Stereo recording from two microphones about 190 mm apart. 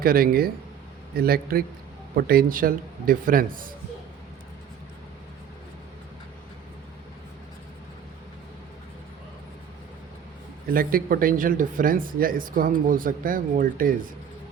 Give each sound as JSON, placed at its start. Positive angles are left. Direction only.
{"t": 0.0, "sound": "speech", "side_deg": -50}
{"t": 10.7, "sound": "speech", "side_deg": -50}